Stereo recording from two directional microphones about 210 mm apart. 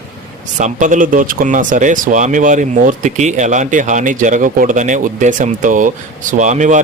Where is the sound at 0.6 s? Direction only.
35° right (ahead or behind).